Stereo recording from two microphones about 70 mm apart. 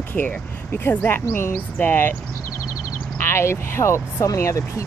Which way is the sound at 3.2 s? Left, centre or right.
Left.